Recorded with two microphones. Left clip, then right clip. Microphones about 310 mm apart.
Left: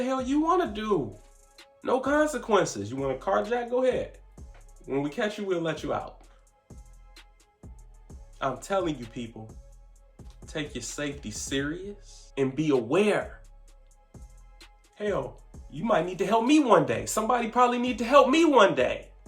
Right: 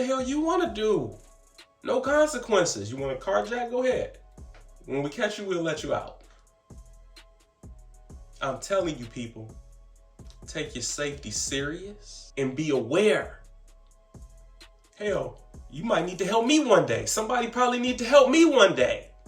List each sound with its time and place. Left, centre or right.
0.0 s speech: centre
6.7 s music: centre
10.2 s speech: centre
14.6 s speech: centre